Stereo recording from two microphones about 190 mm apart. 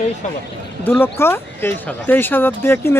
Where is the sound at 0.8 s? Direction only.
10° left (ahead or behind).